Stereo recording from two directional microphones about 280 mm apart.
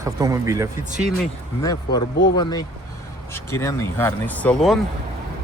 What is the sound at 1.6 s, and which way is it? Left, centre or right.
Speech, centre.